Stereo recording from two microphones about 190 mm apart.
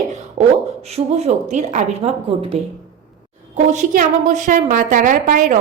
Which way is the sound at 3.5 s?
40° right (ahead or behind).